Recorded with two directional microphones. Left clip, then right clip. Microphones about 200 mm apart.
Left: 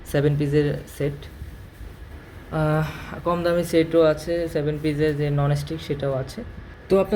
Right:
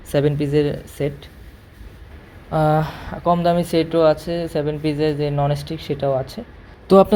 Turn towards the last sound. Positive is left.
turn(degrees=-35)  # may be behind; listen again after turning